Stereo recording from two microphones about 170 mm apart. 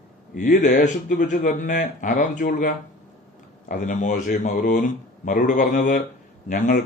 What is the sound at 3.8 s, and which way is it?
A man's voice, 50° left (ahead or behind).